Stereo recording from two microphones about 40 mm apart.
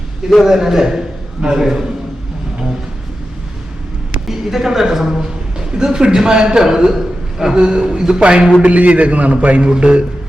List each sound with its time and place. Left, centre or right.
0.4 s a man's voice: centre
4.3 s a woman's voice: centre
7.6 s a man's voice: right